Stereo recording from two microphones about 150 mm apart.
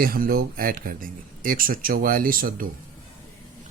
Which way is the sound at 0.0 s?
80° right.